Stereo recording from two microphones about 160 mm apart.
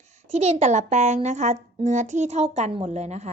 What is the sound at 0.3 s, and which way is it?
Speech, 40° right (ahead or behind).